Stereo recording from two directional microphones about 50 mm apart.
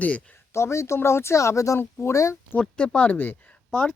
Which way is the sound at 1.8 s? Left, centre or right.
Left.